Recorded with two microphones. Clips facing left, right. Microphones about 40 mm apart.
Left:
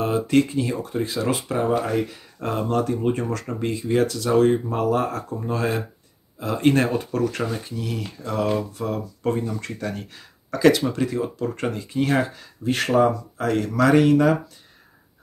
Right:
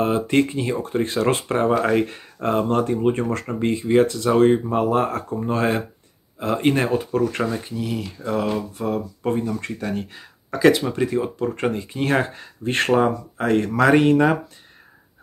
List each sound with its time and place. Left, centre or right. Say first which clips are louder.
0.0 s speech: right 1 dB; right
2.3 s speech: right 3 dB; right
6.6 s speech: left 2 dB; centre
7.2 s speech: right 2 dB; right
7.7 s speech: right 3 dB; centre
8.2 s speech: even; right